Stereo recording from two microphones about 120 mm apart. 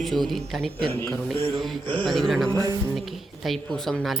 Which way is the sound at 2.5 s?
25° right (ahead or behind).